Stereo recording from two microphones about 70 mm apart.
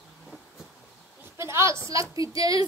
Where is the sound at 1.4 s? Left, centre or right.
Right.